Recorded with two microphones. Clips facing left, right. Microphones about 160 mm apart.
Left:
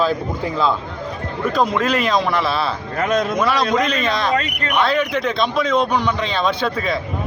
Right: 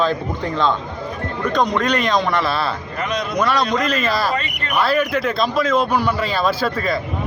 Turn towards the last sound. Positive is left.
turn(degrees=0)  # may be behind; listen again after turning